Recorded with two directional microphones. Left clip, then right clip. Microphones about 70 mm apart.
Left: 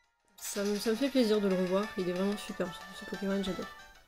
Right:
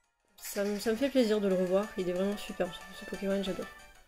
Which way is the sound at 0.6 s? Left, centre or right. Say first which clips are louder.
Right 1 dB; left.